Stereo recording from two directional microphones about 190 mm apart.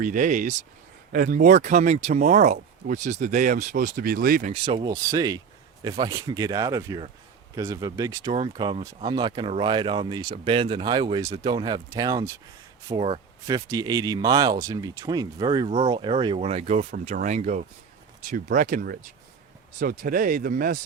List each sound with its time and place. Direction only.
0.0 s speech: 45° right (ahead or behind)
4.5 s speech: 25° right (ahead or behind); by 20.7 s 45° right (ahead or behind)